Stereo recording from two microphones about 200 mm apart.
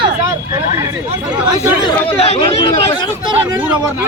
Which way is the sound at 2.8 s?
15° left (ahead or behind).